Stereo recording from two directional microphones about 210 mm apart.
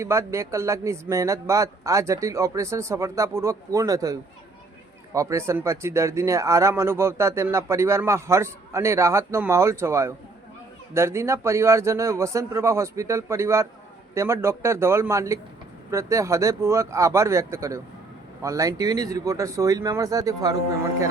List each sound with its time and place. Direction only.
0.0 s speech: 15° right (ahead or behind)